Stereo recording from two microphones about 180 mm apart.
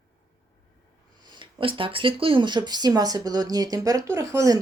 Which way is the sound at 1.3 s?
30° right (ahead or behind).